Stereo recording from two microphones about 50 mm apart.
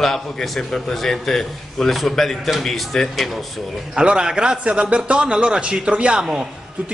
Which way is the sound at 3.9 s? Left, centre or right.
Centre.